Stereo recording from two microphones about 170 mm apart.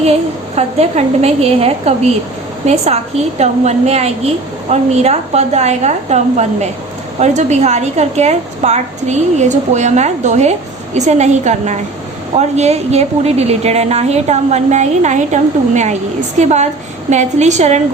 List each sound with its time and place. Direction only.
0.5 s a woman's voice: 40° right (ahead or behind)